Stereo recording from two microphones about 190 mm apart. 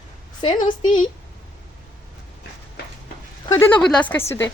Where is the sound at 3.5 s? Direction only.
15° left (ahead or behind).